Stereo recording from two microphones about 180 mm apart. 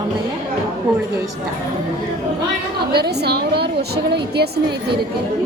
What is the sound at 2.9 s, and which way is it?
A woman's voice, 65° right (ahead or behind).